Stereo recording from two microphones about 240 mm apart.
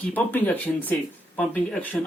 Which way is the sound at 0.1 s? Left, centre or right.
Centre.